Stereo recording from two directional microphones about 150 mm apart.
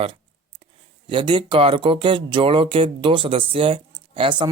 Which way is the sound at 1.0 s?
35° right (ahead or behind).